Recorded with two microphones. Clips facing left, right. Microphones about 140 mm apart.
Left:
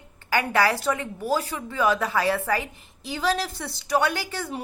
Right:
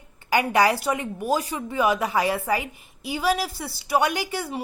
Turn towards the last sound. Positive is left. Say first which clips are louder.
# right 2 dB
turn(degrees=-15)  # may be behind; listen again after turning